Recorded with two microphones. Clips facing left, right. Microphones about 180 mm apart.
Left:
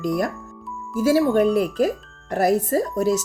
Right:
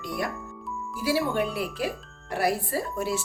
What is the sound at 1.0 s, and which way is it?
Speech, 45° left (ahead or behind).